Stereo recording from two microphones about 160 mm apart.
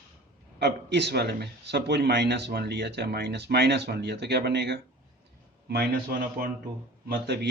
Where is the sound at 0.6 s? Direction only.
90° right.